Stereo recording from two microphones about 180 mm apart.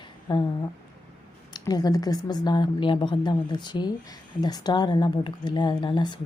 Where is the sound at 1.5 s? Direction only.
20° left (ahead or behind).